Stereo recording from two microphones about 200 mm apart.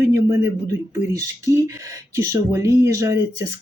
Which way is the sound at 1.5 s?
15° right (ahead or behind).